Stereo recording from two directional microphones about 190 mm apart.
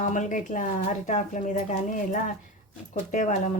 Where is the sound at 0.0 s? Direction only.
40° left (ahead or behind).